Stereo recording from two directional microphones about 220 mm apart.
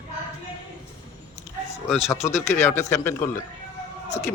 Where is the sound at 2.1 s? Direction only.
10° left (ahead or behind).